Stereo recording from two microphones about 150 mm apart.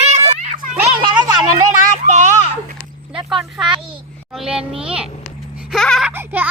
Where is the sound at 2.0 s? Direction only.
50° right (ahead or behind).